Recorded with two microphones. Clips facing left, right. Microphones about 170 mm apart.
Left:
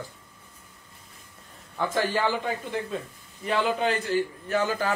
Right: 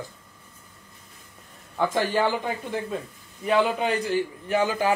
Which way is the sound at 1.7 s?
15° right (ahead or behind).